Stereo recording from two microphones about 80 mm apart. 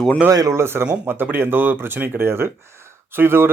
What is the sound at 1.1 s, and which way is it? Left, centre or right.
Speech, right.